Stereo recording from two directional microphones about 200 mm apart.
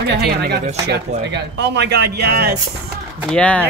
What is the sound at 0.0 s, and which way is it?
Speech, 55° right (ahead or behind).